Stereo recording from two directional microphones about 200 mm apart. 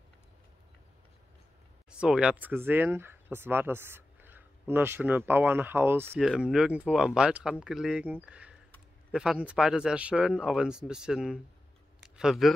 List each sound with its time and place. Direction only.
1.9 s speech: 5° right (ahead or behind)